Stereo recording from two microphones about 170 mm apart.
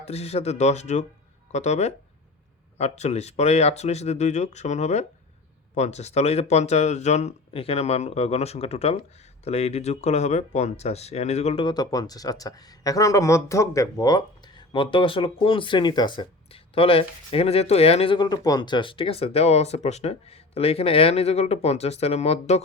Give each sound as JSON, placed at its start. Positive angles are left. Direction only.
{"t": 0.0, "sound": "speech", "side_deg": 40}
{"t": 11.6, "sound": "speech", "side_deg": 25}